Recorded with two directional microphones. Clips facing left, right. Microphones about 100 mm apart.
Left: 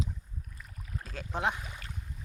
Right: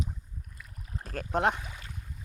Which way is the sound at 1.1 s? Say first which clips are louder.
Right 5 dB; 55° right (ahead or behind).